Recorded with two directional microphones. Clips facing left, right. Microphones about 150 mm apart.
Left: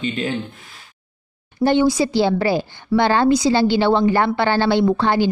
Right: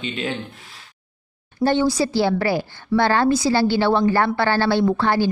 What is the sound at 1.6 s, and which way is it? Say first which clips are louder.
Speech: left 3 dB; 15° left (ahead or behind).